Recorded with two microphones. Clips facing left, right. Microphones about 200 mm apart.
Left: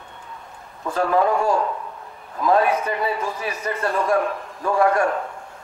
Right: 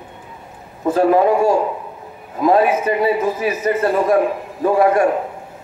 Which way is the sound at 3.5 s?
5° right (ahead or behind).